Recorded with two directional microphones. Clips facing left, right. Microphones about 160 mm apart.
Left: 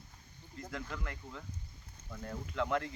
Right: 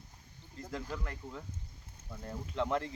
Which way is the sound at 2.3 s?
30° right (ahead or behind).